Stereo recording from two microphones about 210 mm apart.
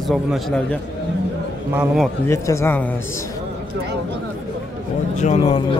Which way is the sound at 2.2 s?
15° left (ahead or behind).